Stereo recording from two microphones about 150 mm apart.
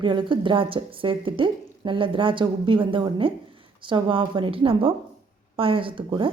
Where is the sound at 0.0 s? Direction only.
30° right (ahead or behind).